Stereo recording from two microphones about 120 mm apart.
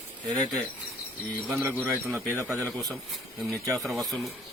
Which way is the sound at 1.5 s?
15° right (ahead or behind).